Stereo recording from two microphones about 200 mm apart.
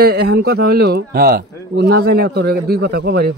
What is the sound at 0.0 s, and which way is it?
A man's voice, 55° right (ahead or behind).